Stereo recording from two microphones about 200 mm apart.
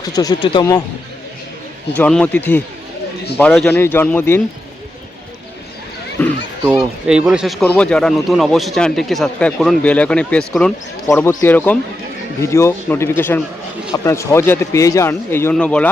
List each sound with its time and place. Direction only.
0.0 s speech: 20° left (ahead or behind)
2.0 s a man's voice: 5° left (ahead or behind)
6.2 s children playing: 10° left (ahead or behind)
7.1 s a man's voice: 5° right (ahead or behind)